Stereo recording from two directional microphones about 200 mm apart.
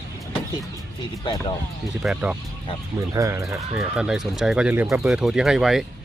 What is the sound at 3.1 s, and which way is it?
Speech, 15° right (ahead or behind).